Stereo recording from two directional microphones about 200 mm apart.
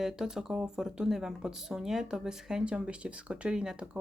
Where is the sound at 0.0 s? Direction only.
Centre (ahead or behind).